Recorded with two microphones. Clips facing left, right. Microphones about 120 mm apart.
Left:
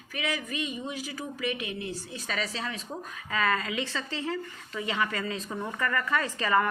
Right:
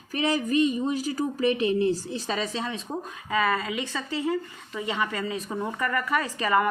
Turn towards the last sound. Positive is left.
turn(degrees=-10)  # may be behind; listen again after turning